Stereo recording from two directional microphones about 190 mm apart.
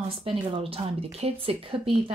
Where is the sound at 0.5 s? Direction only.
30° right (ahead or behind).